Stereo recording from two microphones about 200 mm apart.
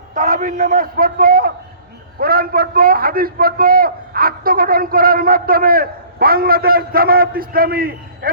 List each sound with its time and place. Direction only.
0.1 s a man's voice: 40° right (ahead or behind)